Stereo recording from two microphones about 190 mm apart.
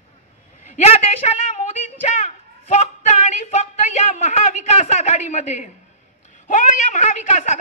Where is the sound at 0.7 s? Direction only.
35° left (ahead or behind).